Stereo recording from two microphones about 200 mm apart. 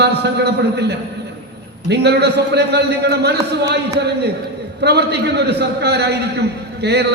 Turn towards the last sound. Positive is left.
turn(degrees=-55)  # may be behind; listen again after turning